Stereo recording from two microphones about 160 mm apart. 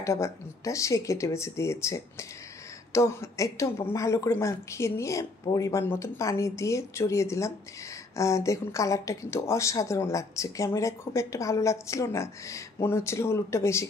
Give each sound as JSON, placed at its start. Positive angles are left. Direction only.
{"t": 0.0, "sound": "a woman's voice", "side_deg": 20}